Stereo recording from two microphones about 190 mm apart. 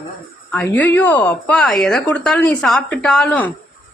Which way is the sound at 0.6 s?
10° left (ahead or behind).